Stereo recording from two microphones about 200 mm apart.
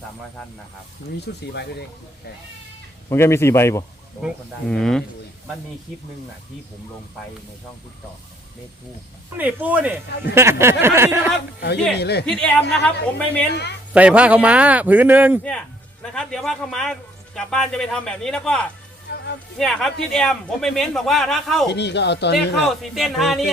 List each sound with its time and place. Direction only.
1.3 s speech: 55° left (ahead or behind)
3.1 s speech: 15° left (ahead or behind)
4.7 s a man's voice: 5° left (ahead or behind)
9.4 s a man's voice: 10° right (ahead or behind)
11.9 s speech: 55° left (ahead or behind)
12.2 s a man's voice: 5° left (ahead or behind)
13.5 s speech: 55° left (ahead or behind)
13.9 s a man's voice: 5° right (ahead or behind)
16.0 s a man's voice: 5° left (ahead or behind)
19.1 s music: 55° left (ahead or behind)
19.5 s a man's voice: centre (ahead or behind)
21.7 s speech: 60° left (ahead or behind)
22.6 s a man's voice: centre (ahead or behind)